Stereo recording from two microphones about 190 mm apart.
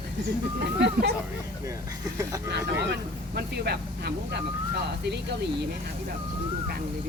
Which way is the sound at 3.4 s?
60° right (ahead or behind).